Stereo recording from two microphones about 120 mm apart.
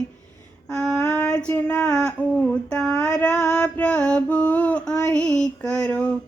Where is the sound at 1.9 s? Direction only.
10° left (ahead or behind).